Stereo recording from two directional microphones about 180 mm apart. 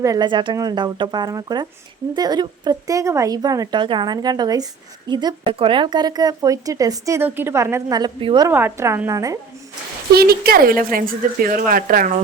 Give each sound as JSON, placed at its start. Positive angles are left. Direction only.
{"t": 0.0, "sound": "speech", "side_deg": -20}
{"t": 8.4, "sound": "a woman's voice", "side_deg": -15}
{"t": 10.2, "sound": "speech", "side_deg": -60}